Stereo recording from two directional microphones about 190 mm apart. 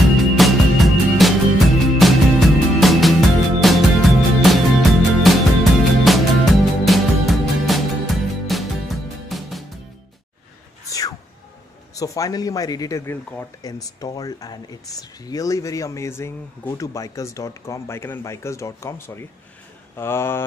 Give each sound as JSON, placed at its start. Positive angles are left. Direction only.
{"t": 0.0, "sound": "music", "side_deg": 0}
{"t": 10.9, "sound": "a sound", "side_deg": 20}
{"t": 11.9, "sound": "speech", "side_deg": 15}